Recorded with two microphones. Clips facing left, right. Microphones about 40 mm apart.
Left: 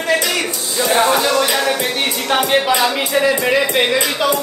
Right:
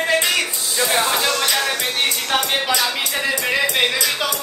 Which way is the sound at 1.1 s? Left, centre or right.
Centre.